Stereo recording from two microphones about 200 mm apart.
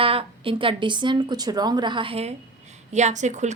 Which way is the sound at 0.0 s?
25° right (ahead or behind).